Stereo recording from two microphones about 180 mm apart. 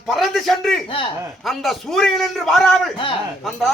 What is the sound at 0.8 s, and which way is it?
Speech, 30° left (ahead or behind).